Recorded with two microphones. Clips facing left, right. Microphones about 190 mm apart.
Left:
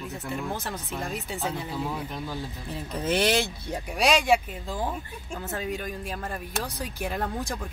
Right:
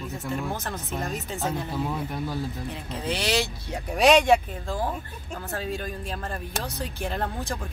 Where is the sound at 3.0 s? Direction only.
50° left (ahead or behind).